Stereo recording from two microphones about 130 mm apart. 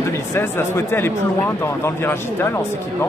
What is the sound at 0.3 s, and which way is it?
Speech, 20° left (ahead or behind).